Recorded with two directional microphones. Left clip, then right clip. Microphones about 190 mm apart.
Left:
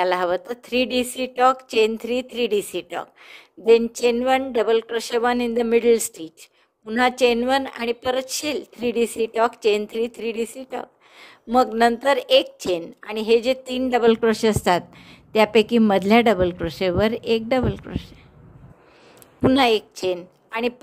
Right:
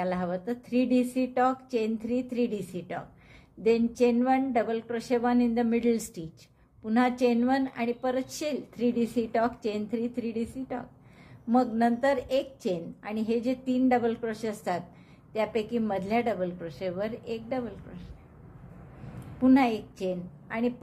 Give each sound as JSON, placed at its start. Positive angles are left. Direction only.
{"t": 0.0, "sound": "a woman's voice", "side_deg": 45}
{"t": 19.5, "sound": "a woman's voice", "side_deg": 50}